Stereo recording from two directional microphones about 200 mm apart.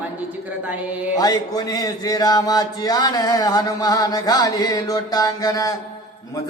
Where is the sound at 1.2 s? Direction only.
20° left (ahead or behind).